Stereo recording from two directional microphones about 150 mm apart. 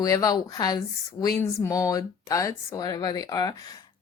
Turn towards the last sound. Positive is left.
turn(degrees=25)  # may be behind; listen again after turning